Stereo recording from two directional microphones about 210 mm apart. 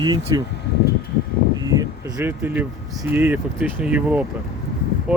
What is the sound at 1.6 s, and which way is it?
Speech, 15° right (ahead or behind).